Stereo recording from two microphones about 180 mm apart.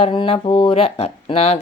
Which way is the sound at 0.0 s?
30° left (ahead or behind).